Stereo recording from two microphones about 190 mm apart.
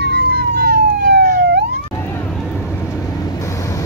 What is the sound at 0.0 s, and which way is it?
Emergency vehicle, 55° right (ahead or behind).